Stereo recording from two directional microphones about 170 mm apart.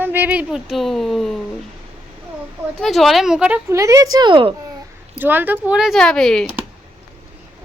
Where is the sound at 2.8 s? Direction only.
Centre (ahead or behind); by 4.5 s 30° right (ahead or behind).